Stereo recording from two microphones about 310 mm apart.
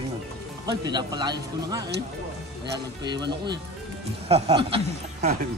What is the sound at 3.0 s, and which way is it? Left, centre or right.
Speech, centre.